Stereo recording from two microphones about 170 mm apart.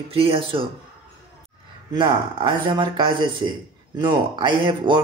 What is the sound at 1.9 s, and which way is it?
Speech, 30° right (ahead or behind).